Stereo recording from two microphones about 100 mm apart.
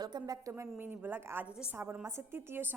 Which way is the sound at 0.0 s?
40° right (ahead or behind).